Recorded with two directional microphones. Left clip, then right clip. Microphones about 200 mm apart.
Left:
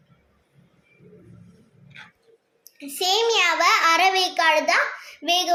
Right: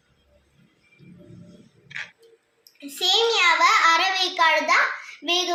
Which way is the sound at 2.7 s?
50° left (ahead or behind).